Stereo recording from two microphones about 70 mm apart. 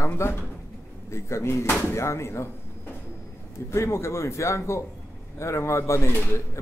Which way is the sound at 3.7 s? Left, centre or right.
Left.